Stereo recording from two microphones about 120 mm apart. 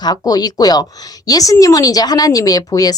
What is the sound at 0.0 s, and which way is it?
A woman's voice, 35° left (ahead or behind).